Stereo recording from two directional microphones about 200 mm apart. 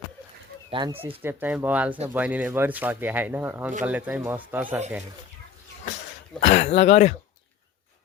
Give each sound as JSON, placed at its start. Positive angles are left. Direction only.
{"t": 0.7, "sound": "speech", "side_deg": -25}
{"t": 1.2, "sound": "speech", "side_deg": -10}
{"t": 6.4, "sound": "speech", "side_deg": 35}